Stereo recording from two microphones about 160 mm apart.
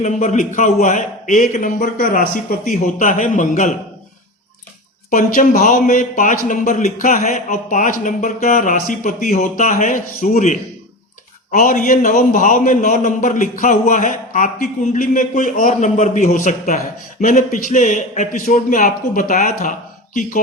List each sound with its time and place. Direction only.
0.0 s a man's voice: 50° left (ahead or behind)
5.1 s a man's voice: 55° left (ahead or behind)